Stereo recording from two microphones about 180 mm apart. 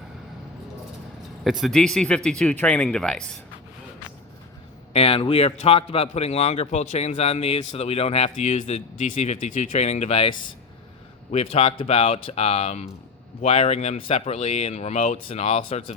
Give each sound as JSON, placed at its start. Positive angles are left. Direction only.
{"t": 1.5, "sound": "speech", "side_deg": 0}
{"t": 4.9, "sound": "speech", "side_deg": 35}